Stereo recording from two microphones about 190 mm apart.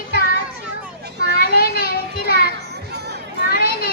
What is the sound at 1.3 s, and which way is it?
Children playing, 55° left (ahead or behind).